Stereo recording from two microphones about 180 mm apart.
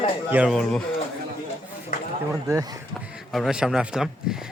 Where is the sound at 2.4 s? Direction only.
20° right (ahead or behind).